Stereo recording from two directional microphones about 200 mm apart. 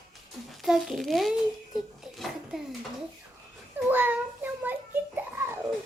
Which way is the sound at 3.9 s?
10° right (ahead or behind).